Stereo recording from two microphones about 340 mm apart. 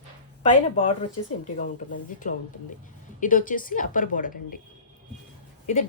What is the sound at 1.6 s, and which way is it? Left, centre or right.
Speech, left.